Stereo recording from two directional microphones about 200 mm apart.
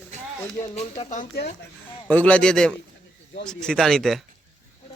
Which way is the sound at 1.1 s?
45° left (ahead or behind).